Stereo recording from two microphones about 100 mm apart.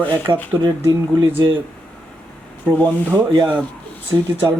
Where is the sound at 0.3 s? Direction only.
55° right (ahead or behind).